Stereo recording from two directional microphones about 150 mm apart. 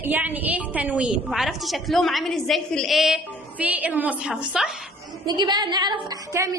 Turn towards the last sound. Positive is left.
turn(degrees=-20)  # may be behind; listen again after turning